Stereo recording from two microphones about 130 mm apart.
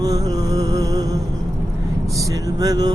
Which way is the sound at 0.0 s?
30° right (ahead or behind).